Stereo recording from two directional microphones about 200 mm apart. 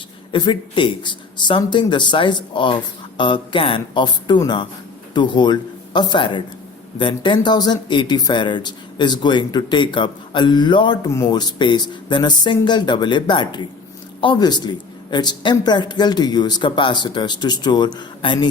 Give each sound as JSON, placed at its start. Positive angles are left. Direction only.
{"t": 0.3, "sound": "speech", "side_deg": 25}